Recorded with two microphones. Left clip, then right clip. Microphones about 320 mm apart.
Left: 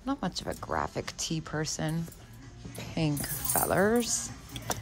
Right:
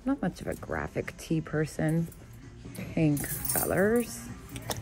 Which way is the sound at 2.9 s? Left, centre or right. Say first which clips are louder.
Right 4 dB; left.